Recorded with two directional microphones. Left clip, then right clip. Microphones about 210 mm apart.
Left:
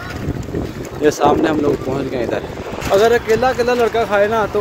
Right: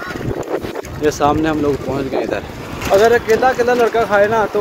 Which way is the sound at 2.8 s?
10° left (ahead or behind).